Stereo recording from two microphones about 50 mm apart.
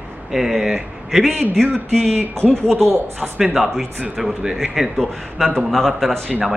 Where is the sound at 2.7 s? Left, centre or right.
Right.